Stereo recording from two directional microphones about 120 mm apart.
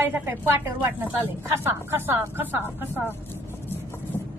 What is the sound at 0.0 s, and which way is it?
Speech, 15° right (ahead or behind).